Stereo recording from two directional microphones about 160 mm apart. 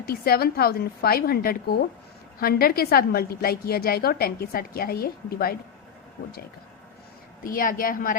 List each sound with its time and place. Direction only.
0.0 s a woman's voice: 70° left (ahead or behind)
7.4 s a woman's voice: 60° left (ahead or behind)